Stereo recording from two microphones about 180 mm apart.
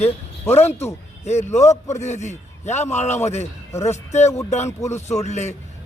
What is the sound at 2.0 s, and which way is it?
A man's voice, 40° left (ahead or behind).